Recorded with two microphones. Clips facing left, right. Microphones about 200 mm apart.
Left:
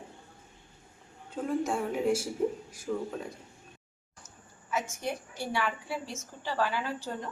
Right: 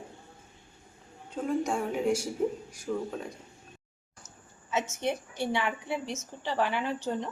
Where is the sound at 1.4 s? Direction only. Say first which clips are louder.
Right 1 dB; centre (ahead or behind).